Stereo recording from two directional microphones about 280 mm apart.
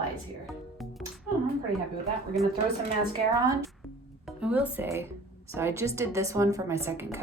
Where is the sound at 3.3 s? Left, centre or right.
Centre.